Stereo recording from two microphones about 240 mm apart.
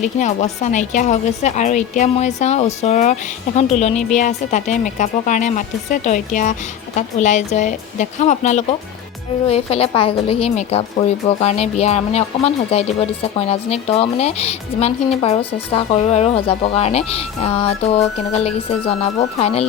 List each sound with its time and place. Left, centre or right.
0.0 s a woman's voice: left